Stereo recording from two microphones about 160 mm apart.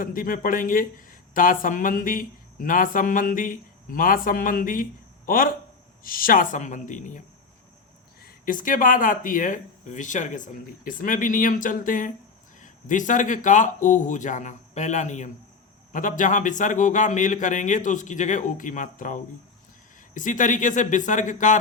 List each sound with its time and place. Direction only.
0.0 s speech: 60° left (ahead or behind)
8.2 s a man's voice: 60° left (ahead or behind)